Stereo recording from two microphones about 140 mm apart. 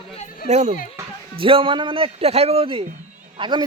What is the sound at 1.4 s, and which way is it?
A man's voice, 40° right (ahead or behind).